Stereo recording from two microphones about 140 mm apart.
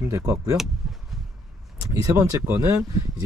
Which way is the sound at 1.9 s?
20° right (ahead or behind).